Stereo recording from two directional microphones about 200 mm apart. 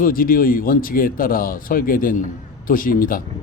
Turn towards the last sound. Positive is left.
turn(degrees=45)  # may be behind; listen again after turning